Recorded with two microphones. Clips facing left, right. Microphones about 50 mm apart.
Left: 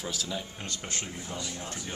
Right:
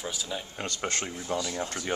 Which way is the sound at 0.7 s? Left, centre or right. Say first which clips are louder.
Right 5 dB; right.